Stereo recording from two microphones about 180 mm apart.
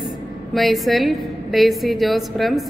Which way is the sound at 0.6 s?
Centre (ahead or behind).